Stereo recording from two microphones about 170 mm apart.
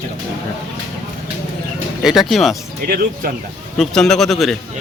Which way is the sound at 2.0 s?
Centre (ahead or behind).